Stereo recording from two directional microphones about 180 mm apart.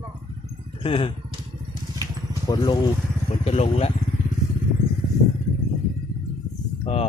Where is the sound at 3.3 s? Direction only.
35° left (ahead or behind).